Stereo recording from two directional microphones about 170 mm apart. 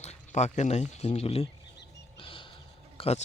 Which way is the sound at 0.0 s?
40° left (ahead or behind).